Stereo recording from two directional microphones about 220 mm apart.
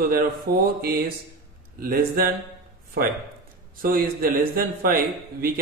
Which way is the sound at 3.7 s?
40° right (ahead or behind).